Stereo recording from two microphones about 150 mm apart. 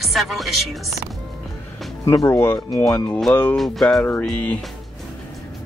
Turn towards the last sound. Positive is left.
turn(degrees=10)  # may be behind; listen again after turning